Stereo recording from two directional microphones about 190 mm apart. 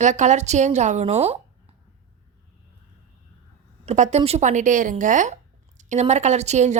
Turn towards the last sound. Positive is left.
turn(degrees=-35)  # may be behind; listen again after turning